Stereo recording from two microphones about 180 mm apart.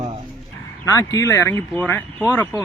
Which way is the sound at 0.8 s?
20° left (ahead or behind).